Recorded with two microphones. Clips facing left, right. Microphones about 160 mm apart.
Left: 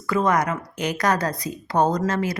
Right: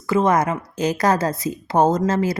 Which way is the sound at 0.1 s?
25° right (ahead or behind).